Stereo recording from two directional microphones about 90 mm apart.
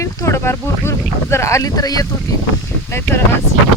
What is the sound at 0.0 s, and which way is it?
Speech, 35° left (ahead or behind).